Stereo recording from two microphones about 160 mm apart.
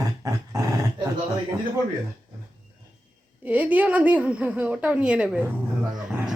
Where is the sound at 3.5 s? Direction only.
10° right (ahead or behind).